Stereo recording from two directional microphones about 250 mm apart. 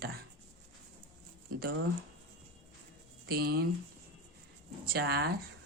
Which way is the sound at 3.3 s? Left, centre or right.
Right.